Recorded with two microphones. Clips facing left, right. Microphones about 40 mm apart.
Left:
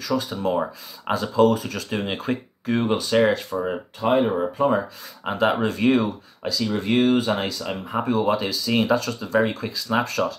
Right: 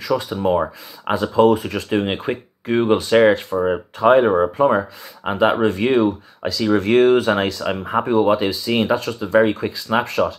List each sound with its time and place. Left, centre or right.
0.0 s speech: right
3.5 s speech: right
4.0 s speech: right
4.6 s speech: right
6.4 s speech: right